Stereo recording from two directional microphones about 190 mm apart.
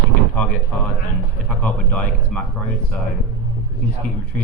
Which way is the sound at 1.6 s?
5° left (ahead or behind).